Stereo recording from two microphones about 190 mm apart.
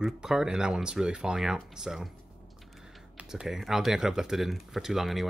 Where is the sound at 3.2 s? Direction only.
5° right (ahead or behind).